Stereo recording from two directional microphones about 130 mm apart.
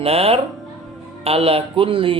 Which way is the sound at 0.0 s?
50° right (ahead or behind).